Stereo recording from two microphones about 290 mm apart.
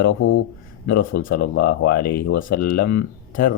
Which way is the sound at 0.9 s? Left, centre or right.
Left.